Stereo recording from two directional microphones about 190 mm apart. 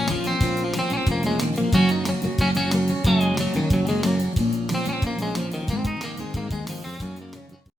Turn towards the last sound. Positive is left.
turn(degrees=0)  # may be behind; listen again after turning